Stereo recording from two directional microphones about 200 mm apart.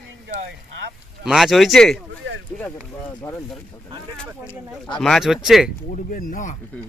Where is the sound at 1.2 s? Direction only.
Centre (ahead or behind).